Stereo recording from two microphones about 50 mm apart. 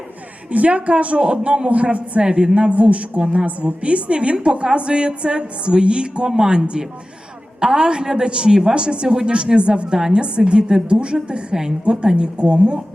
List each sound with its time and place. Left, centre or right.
0.5 s a woman's voice: right